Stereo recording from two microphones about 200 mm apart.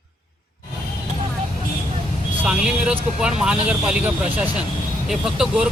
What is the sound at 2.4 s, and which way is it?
Vehicle, 5° right (ahead or behind).